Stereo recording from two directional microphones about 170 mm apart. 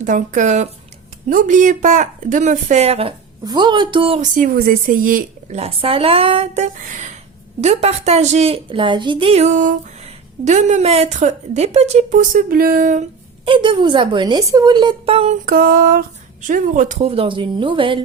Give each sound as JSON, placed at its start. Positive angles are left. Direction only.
{"t": 0.0, "sound": "a woman's voice", "side_deg": -50}
{"t": 3.4, "sound": "a woman's voice", "side_deg": -25}
{"t": 4.2, "sound": "speech", "side_deg": -55}
{"t": 5.5, "sound": "a woman's voice", "side_deg": -35}
{"t": 13.4, "sound": "a woman's voice", "side_deg": -30}
{"t": 15.4, "sound": "a woman's voice", "side_deg": -55}